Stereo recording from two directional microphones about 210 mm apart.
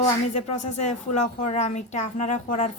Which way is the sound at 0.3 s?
30° left (ahead or behind).